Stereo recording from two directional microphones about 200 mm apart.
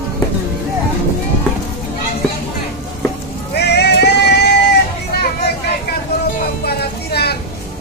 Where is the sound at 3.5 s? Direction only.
55° left (ahead or behind).